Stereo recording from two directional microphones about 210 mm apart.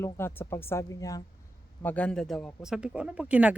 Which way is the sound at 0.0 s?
10° left (ahead or behind).